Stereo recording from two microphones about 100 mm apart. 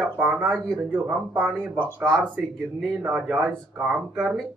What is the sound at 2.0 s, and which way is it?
Speech, 5° left (ahead or behind).